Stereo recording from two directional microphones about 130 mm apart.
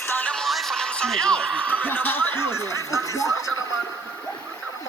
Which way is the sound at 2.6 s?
25° right (ahead or behind).